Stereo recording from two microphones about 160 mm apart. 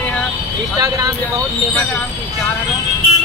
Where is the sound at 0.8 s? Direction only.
20° right (ahead or behind).